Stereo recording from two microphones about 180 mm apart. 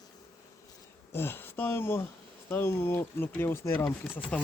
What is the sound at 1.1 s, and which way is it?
Speech, 10° left (ahead or behind).